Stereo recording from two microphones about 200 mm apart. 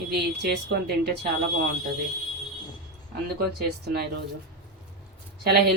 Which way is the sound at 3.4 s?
50° right (ahead or behind).